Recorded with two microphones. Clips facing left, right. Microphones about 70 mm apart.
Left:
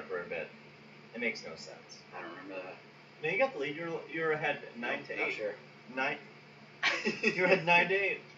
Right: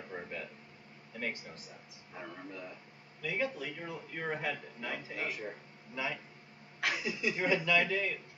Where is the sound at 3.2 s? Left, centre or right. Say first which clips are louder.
Left 5 dB; left.